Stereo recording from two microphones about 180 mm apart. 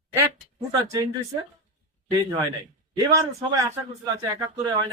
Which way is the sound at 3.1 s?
15° right (ahead or behind).